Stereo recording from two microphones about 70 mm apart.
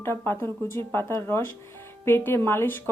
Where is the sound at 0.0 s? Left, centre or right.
Left.